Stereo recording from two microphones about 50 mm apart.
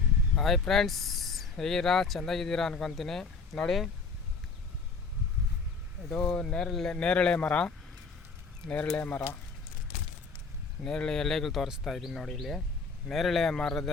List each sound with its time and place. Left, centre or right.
0.3 s speech: centre
6.1 s speech: centre
6.7 s speech: centre
6.9 s speech: centre
10.8 s speech: centre
13.6 s speech: centre